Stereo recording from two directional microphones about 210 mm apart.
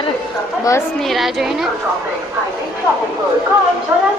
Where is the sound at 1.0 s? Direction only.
Centre (ahead or behind).